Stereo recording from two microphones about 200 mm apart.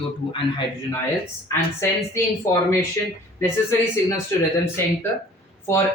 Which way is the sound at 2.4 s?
15° left (ahead or behind).